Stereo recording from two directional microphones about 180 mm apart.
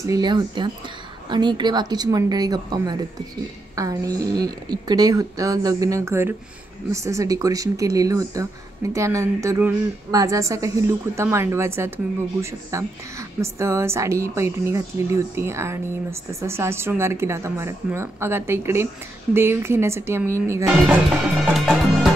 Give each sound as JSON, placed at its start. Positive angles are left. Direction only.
{"t": 0.0, "sound": "a woman's voice", "side_deg": -20}
{"t": 21.5, "sound": "music", "side_deg": 0}